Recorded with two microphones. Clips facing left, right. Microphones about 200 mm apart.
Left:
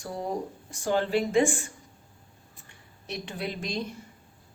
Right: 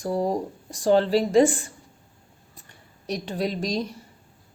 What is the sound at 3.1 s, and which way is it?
Speech, 35° right (ahead or behind).